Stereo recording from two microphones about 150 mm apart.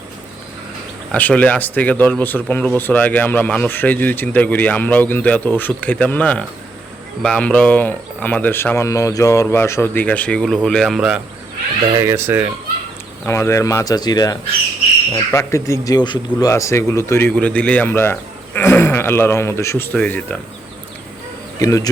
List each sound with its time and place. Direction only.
1.1 s speech: 10° left (ahead or behind)
11.9 s speech: 20° right (ahead or behind)
13.2 s speech: 20° left (ahead or behind)
21.6 s speech: 20° left (ahead or behind)